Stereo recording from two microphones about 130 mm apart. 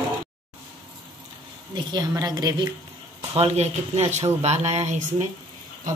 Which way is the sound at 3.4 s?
50° right (ahead or behind).